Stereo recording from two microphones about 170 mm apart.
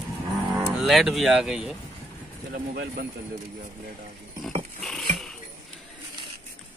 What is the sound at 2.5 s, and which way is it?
Speech, 60° right (ahead or behind).